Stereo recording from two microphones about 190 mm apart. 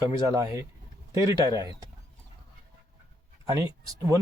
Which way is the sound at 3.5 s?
20° right (ahead or behind).